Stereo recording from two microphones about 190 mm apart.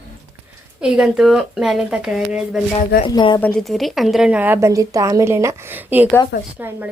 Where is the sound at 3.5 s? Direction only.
Centre (ahead or behind).